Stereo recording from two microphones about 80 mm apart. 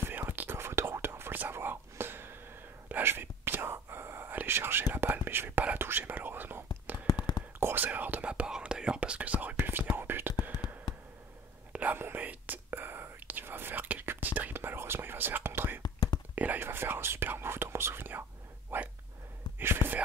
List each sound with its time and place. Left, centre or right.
0.0 s whispering: right
7.1 s whispering: left
7.6 s whispering: right
11.7 s whispering: right
15.8 s whispering: left
16.3 s whispering: right
18.7 s a sound: right
19.6 s whispering: right